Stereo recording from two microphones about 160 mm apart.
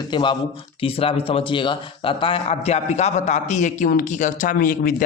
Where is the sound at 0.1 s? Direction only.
30° left (ahead or behind).